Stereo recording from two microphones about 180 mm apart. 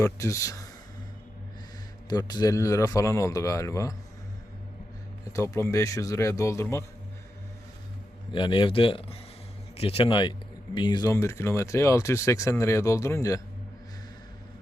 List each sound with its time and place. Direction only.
0.0 s speech: 15° left (ahead or behind)
2.0 s speech: 20° left (ahead or behind)
5.3 s speech: 15° left (ahead or behind)
8.3 s speech: 25° left (ahead or behind)